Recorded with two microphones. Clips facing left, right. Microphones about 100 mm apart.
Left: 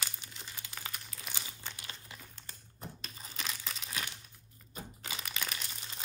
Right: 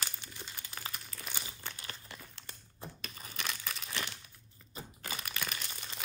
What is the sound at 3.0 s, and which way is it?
Crumpling, 55° right (ahead or behind).